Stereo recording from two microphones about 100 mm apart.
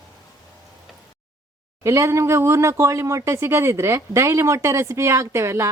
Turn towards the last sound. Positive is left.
turn(degrees=-25)  # may be behind; listen again after turning